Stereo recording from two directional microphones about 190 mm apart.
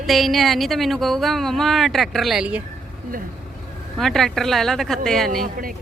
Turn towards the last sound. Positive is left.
turn(degrees=0)  # may be behind; listen again after turning